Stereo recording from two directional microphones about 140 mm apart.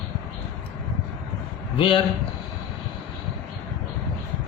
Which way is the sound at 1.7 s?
40° left (ahead or behind).